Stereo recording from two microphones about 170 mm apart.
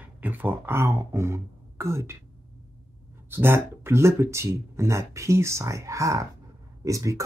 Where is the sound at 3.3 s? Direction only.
15° right (ahead or behind).